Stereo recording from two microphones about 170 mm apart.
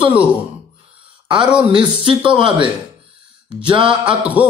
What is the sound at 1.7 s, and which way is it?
Speech, 30° right (ahead or behind).